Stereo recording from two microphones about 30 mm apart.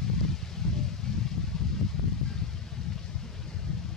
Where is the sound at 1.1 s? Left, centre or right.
Left.